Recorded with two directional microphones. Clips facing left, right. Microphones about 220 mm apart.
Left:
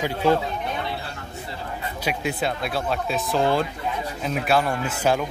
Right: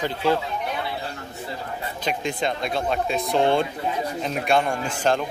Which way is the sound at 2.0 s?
5° left (ahead or behind).